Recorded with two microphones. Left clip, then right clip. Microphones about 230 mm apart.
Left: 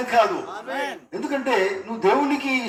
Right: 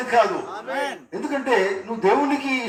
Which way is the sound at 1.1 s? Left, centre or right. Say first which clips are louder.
Right 1 dB; left.